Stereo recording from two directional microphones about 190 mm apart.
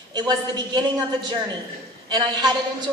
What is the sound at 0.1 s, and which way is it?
A woman's voice, 20° right (ahead or behind).